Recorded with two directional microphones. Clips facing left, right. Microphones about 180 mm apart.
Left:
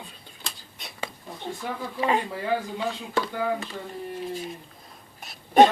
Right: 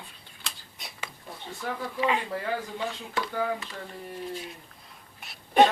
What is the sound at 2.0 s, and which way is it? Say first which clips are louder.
Speech: left 3 dB; 40° left (ahead or behind).